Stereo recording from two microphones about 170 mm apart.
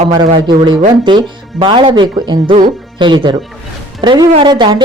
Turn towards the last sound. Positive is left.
turn(degrees=-25)  # may be behind; listen again after turning